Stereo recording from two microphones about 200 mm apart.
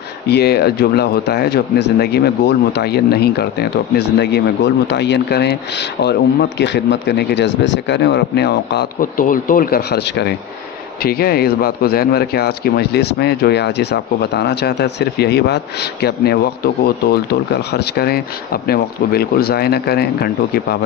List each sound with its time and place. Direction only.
0.3 s speech: 55° left (ahead or behind)